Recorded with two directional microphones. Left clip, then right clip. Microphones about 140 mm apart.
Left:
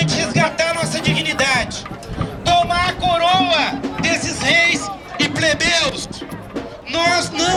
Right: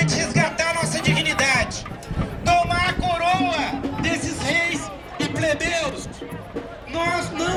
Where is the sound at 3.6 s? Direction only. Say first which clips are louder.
Left 5 dB; 30° left (ahead or behind).